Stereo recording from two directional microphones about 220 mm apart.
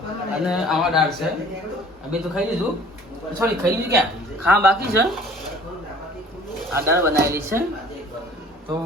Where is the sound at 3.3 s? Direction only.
15° right (ahead or behind).